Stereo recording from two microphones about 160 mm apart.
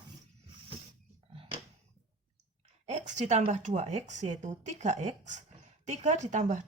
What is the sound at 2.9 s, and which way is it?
A woman's voice, 45° right (ahead or behind).